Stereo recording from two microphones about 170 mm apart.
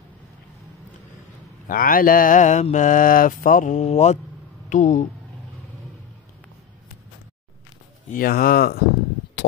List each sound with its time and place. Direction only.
1.7 s mantra: 55° left (ahead or behind)
4.6 s speech: 45° left (ahead or behind)
8.1 s speech: 60° left (ahead or behind)